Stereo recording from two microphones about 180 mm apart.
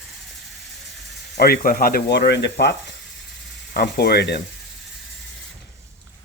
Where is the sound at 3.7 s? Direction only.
65° left (ahead or behind).